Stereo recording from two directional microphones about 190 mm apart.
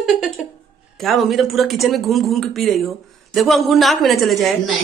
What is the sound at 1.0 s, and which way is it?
A woman's voice, centre (ahead or behind).